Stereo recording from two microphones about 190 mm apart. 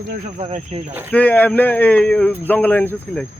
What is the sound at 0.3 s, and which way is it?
Speech, 35° right (ahead or behind).